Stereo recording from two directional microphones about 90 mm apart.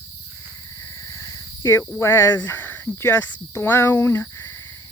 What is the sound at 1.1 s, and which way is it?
Cricket, 40° left (ahead or behind).